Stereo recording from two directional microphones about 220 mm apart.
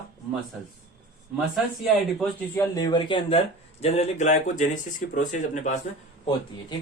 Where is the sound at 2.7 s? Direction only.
20° left (ahead or behind).